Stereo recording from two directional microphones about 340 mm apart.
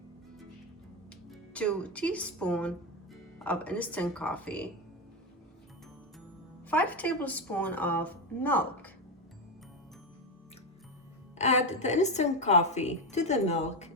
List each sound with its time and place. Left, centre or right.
1.3 s a woman's voice: centre
6.7 s a woman's voice: centre
11.3 s a woman's voice: centre